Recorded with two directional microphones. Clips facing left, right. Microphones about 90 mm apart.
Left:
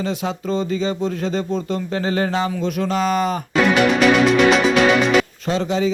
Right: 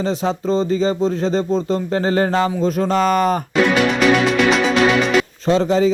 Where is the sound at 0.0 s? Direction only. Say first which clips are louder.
Right 4 dB; 30° right (ahead or behind).